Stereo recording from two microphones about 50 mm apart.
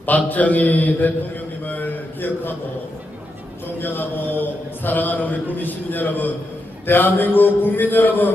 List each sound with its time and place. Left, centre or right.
0.0 s mantra: left
1.6 s a man's voice: left
3.8 s mantra: left